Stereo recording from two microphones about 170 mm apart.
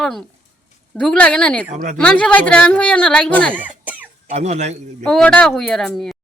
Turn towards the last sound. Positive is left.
turn(degrees=5)  # may be behind; listen again after turning